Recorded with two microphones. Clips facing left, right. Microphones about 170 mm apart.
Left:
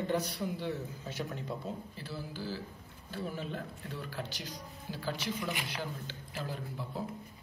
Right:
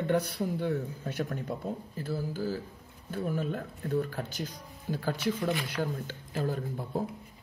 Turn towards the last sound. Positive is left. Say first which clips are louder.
# right 6 dB
turn(degrees=-50)  # may be behind; listen again after turning